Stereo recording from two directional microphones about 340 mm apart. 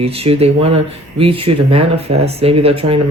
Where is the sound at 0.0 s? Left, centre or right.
Centre.